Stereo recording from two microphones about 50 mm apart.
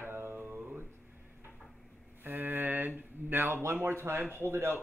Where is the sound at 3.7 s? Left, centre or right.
Right.